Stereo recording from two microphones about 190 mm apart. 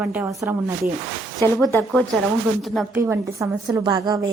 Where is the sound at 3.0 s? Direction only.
15° right (ahead or behind).